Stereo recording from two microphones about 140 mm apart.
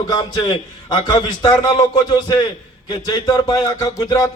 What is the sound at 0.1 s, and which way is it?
Speech, 30° left (ahead or behind).